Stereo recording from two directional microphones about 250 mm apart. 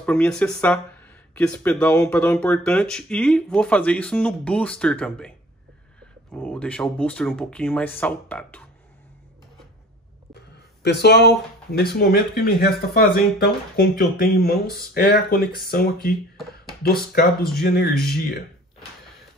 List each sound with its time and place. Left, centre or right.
0.0 s speech: centre
6.3 s speech: centre
10.8 s speech: left
17.6 s speech: left